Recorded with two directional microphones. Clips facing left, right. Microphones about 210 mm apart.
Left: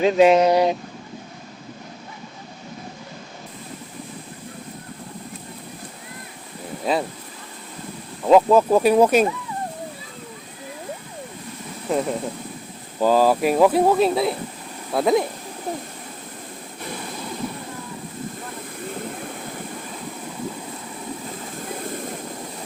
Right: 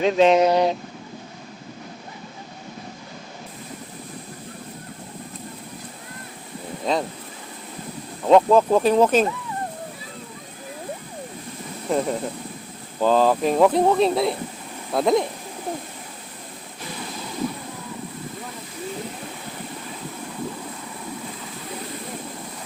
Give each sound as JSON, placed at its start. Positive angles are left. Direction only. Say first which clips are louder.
{"t": 0.0, "sound": "speech", "louder": "left 2 dB", "side_deg": 5}
{"t": 6.8, "sound": "speech", "louder": "left 1 dB", "side_deg": 5}
{"t": 8.2, "sound": "speech", "louder": "left 1 dB", "side_deg": 5}
{"t": 11.9, "sound": "speech", "louder": "even", "side_deg": 0}